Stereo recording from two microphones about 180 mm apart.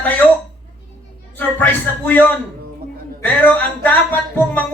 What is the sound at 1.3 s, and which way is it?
Speech, 10° left (ahead or behind).